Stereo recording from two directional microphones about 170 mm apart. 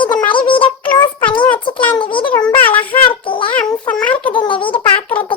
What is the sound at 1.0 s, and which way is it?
Music, 30° left (ahead or behind).